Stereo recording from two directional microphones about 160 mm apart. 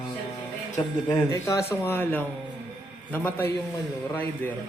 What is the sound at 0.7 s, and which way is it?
A man's voice, 20° left (ahead or behind).